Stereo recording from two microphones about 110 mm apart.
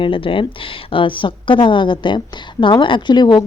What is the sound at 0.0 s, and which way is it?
A woman's voice, 50° left (ahead or behind).